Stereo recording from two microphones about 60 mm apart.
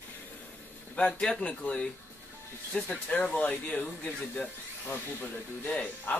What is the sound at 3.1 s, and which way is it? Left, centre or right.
Speech, left.